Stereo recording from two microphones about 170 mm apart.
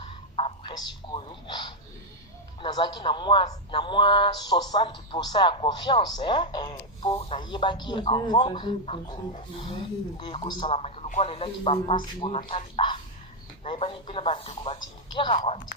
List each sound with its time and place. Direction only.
0.7 s speech: 25° left (ahead or behind)
10.2 s speech: 30° left (ahead or behind)